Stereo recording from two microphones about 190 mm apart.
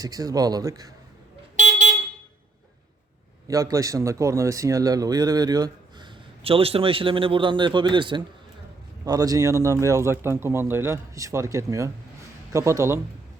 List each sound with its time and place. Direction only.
0.0 s speech: 20° right (ahead or behind)
1.5 s a sound: 40° right (ahead or behind)
3.4 s speech: 15° right (ahead or behind)